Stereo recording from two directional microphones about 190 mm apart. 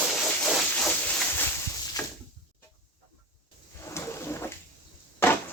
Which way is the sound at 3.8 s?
15° left (ahead or behind).